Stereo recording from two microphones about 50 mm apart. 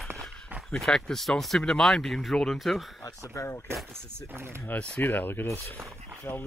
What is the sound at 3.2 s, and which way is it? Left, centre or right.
Speech, left.